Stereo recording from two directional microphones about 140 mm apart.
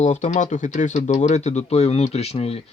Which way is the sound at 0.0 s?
60° left (ahead or behind).